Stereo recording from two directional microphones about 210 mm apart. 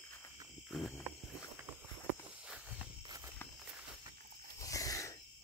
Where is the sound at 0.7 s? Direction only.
Centre (ahead or behind).